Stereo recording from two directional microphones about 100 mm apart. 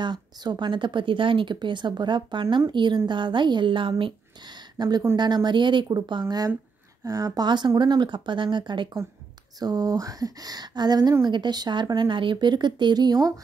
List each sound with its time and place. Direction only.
0.0 s speech: 50° right (ahead or behind)
9.6 s speech: 40° right (ahead or behind)